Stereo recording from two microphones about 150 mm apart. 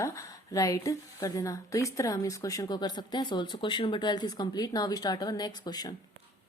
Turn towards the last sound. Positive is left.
turn(degrees=25)  # may be behind; listen again after turning